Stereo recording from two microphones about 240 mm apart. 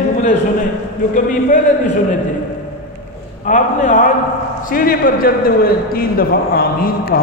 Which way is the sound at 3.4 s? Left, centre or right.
Left.